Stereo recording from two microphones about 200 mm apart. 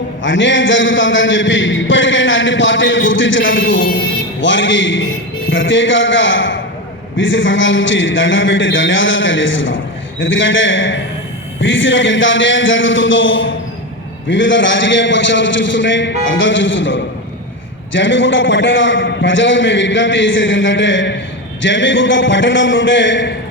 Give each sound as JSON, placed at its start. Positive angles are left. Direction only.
{"t": 0.2, "sound": "a man's voice", "side_deg": 65}